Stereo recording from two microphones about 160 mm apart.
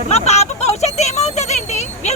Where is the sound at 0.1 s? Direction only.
45° left (ahead or behind).